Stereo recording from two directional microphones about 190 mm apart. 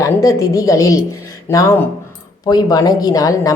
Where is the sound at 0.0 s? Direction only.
15° left (ahead or behind).